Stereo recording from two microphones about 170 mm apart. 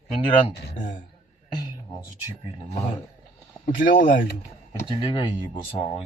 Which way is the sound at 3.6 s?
50° left (ahead or behind).